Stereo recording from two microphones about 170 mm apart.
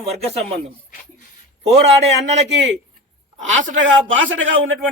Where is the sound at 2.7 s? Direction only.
45° right (ahead or behind).